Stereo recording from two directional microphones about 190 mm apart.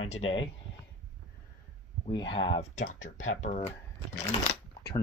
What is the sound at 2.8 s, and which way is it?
Speech, 40° left (ahead or behind).